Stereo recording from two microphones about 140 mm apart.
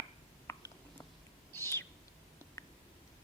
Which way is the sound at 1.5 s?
15° left (ahead or behind).